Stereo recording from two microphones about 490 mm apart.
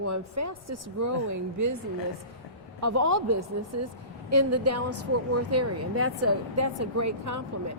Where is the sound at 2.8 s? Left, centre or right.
Right.